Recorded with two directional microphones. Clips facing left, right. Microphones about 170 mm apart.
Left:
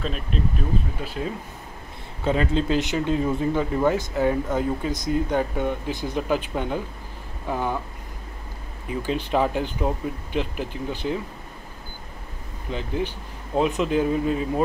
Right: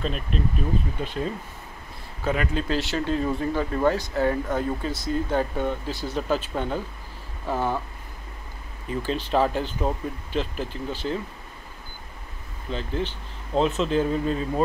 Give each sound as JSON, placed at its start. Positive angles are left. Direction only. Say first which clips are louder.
{"t": 0.0, "sound": "speech", "louder": "even", "side_deg": 0}
{"t": 2.2, "sound": "speech", "louder": "left 3 dB", "side_deg": 25}
{"t": 8.8, "sound": "speech", "louder": "left 1 dB", "side_deg": 15}
{"t": 12.7, "sound": "speech", "louder": "left 1 dB", "side_deg": 15}